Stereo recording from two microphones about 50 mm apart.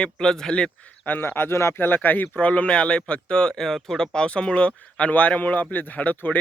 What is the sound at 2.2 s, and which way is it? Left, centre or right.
Speech, left.